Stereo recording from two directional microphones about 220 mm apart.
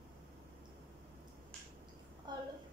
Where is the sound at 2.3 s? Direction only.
20° right (ahead or behind).